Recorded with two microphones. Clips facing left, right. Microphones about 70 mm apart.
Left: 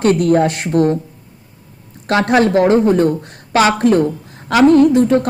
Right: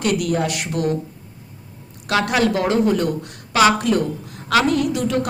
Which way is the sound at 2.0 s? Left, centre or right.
Left.